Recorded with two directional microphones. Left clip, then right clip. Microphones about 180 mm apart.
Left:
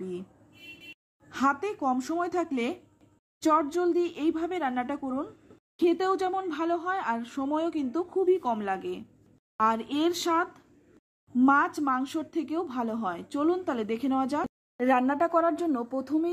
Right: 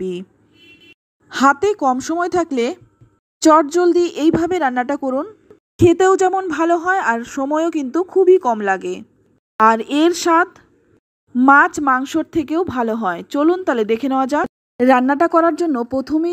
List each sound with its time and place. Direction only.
1.3 s speech: 40° right (ahead or behind)